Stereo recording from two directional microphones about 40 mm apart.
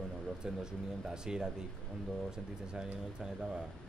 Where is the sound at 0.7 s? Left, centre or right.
Centre.